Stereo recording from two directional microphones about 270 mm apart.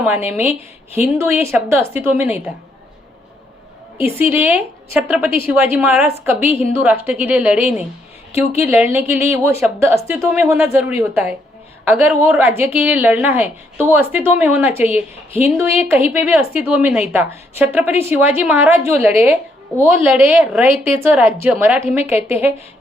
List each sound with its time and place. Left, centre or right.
0.0 s a woman's voice: centre
4.0 s a woman's voice: centre
6.5 s a woman's voice: left
7.0 s a woman's voice: centre